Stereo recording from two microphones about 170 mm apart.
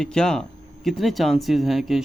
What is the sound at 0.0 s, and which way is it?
Speech, 5° left (ahead or behind).